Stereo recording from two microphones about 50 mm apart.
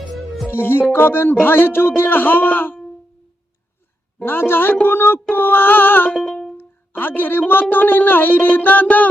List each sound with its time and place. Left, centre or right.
0.5 s a man's voice: left
4.2 s a man's voice: left
6.1 s music: centre
6.6 s speech: left